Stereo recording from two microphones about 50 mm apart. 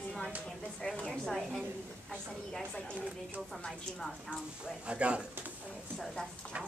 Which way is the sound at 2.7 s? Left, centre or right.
Left.